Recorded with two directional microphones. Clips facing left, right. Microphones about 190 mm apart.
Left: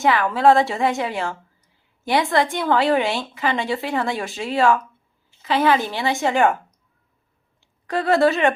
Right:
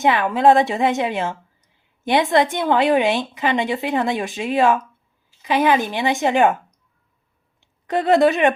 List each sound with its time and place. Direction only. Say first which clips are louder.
0.0 s a woman's voice: right 1 dB; 20° right (ahead or behind)
7.6 s speech: right 2 dB; 20° right (ahead or behind)